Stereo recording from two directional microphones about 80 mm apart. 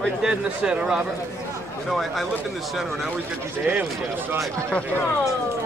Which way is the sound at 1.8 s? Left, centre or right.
Centre.